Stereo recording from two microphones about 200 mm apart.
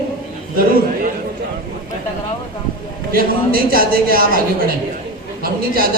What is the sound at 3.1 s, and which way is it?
A woman's voice, 45° right (ahead or behind).